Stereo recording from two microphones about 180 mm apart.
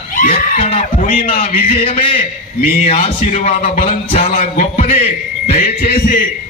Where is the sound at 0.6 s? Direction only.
35° left (ahead or behind).